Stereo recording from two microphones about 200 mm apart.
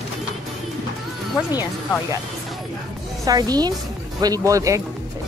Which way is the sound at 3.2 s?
20° right (ahead or behind).